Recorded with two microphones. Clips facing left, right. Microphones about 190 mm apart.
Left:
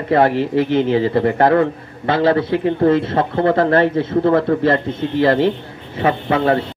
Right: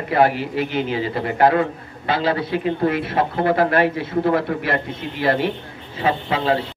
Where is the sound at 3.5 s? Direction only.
25° left (ahead or behind).